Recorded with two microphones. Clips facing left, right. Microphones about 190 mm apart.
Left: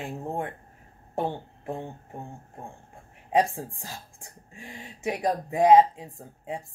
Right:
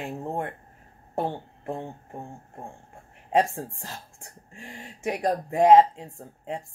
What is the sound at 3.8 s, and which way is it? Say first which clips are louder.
Speech: right 1 dB; 15° left (ahead or behind).